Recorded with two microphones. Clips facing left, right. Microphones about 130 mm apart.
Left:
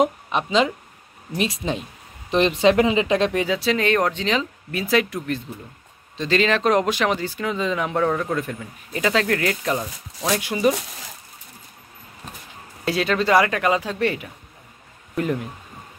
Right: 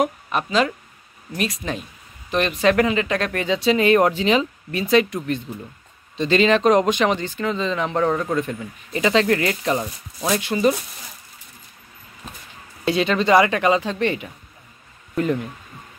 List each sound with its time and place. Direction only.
0.0 s speech: 20° left (ahead or behind)
3.4 s speech: centre (ahead or behind)
10.4 s speech: 10° left (ahead or behind)
12.8 s speech: centre (ahead or behind)